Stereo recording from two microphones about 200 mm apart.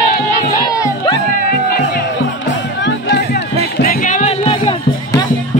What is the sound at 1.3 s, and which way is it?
Music, 50° left (ahead or behind).